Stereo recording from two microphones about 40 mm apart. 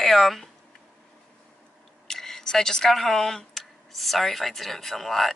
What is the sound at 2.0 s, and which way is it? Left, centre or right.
Speech, centre.